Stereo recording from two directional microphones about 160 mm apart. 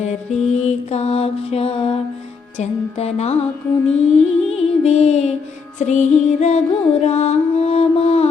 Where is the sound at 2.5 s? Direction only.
40° left (ahead or behind).